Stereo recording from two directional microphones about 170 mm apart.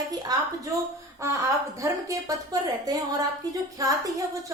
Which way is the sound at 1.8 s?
20° right (ahead or behind).